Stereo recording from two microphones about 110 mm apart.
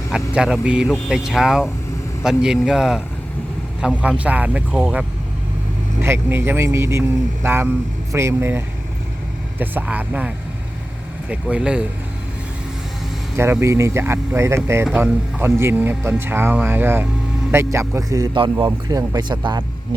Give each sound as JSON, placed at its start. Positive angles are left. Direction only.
{"t": 0.1, "sound": "speech", "side_deg": -5}
{"t": 6.0, "sound": "speech", "side_deg": -20}
{"t": 13.3, "sound": "speech", "side_deg": -25}